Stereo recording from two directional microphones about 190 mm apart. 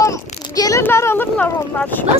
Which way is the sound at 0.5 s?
20° left (ahead or behind).